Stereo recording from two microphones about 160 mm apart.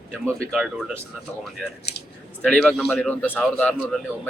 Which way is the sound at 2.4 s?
5° left (ahead or behind).